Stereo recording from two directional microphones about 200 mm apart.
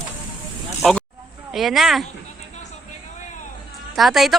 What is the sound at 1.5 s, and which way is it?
Speech, centre (ahead or behind).